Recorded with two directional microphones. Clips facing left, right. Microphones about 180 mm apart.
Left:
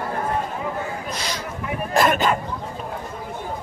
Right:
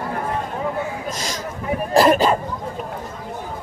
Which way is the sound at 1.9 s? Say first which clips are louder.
Right 4 dB; 35° right (ahead or behind).